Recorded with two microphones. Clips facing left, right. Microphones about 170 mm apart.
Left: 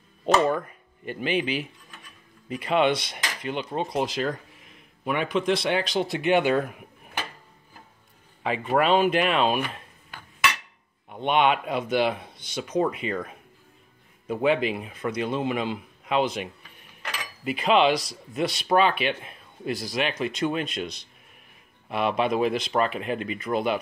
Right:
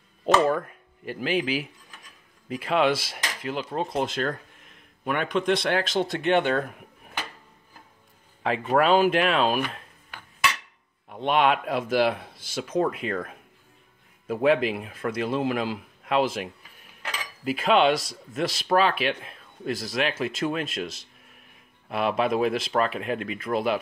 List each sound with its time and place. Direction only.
0.2 s speech: centre (ahead or behind)
2.4 s cutlery: centre (ahead or behind)
8.5 s cutlery: centre (ahead or behind)
11.1 s cutlery: centre (ahead or behind)
14.2 s speech: centre (ahead or behind)
17.5 s cutlery: centre (ahead or behind)